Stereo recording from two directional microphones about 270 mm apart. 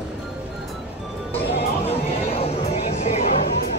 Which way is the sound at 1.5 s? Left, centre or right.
Left.